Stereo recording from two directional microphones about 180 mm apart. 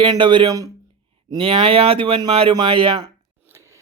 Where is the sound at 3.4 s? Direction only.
15° right (ahead or behind).